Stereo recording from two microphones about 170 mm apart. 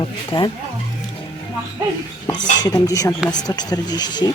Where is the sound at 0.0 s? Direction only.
25° left (ahead or behind).